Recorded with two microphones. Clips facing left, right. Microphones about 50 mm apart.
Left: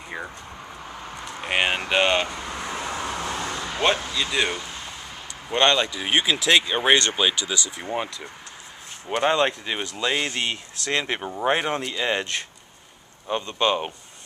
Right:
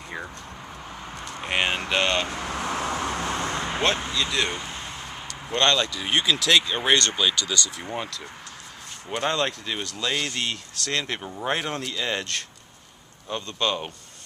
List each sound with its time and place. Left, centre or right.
0.8 s vehicle: centre
2.5 s vehicle: right
2.9 s vehicle: right
4.1 s speech: centre
4.6 s a sound: centre
5.3 s speech: centre